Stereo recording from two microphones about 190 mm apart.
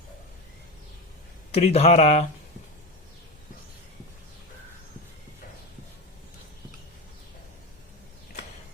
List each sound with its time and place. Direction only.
1.5 s speech: 35° left (ahead or behind)